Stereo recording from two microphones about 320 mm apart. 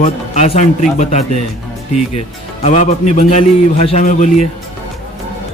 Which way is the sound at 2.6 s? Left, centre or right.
Left.